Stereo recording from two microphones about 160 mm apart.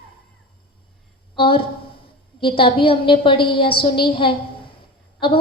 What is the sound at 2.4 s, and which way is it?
A woman's voice, 30° left (ahead or behind).